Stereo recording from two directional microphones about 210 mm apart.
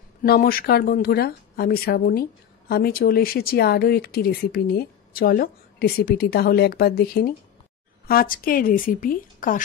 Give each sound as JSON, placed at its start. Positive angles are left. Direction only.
{"t": 0.2, "sound": "a woman's voice", "side_deg": 45}